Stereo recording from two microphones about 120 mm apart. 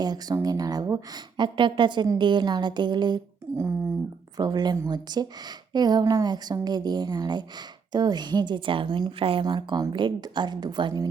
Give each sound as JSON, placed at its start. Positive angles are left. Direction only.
{"t": 0.0, "sound": "a woman's voice", "side_deg": -35}
{"t": 4.4, "sound": "a woman's voice", "side_deg": -35}